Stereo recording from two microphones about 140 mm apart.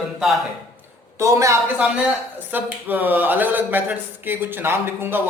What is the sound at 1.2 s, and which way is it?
A woman's voice, 20° right (ahead or behind).